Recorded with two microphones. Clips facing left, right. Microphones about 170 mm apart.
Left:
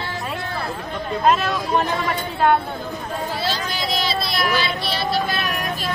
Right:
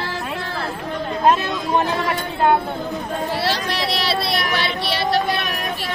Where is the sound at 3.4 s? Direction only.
75° right (ahead or behind).